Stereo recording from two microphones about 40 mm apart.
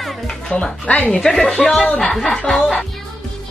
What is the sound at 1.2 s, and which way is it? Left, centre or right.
A woman's voice, centre.